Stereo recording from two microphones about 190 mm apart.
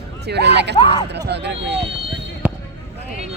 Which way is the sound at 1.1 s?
60° right (ahead or behind).